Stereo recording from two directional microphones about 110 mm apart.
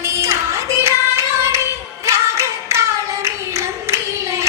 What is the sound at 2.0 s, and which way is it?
Clapping, 25° right (ahead or behind).